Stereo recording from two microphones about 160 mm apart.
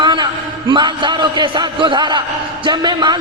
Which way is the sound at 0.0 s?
30° right (ahead or behind).